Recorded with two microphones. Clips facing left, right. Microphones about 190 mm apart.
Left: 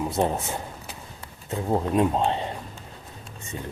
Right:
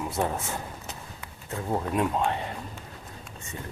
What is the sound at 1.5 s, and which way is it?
Speech, 20° left (ahead or behind).